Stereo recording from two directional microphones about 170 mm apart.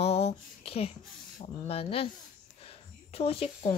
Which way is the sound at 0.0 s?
35° left (ahead or behind).